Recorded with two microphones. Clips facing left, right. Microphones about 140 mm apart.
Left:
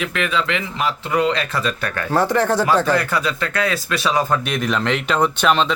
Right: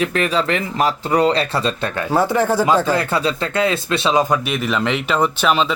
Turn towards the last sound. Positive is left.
turn(degrees=-5)  # may be behind; listen again after turning